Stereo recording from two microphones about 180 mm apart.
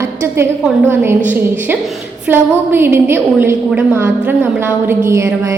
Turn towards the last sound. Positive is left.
turn(degrees=-15)  # may be behind; listen again after turning